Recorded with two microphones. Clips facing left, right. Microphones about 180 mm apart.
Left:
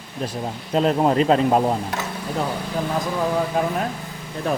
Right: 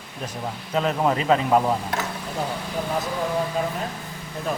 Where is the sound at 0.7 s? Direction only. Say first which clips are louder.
Left 4 dB; 35° left (ahead or behind).